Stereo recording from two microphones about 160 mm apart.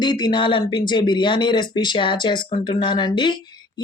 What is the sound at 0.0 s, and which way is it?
Speech, 25° left (ahead or behind).